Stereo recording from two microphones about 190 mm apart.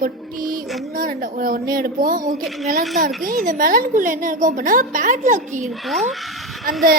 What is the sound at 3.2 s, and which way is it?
A woman's voice, 45° right (ahead or behind).